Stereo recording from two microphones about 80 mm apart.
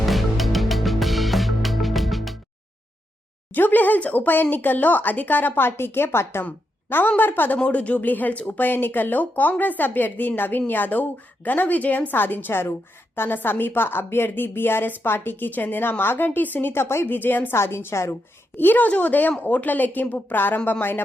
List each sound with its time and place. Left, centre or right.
0.0 s music: centre
3.5 s speech: left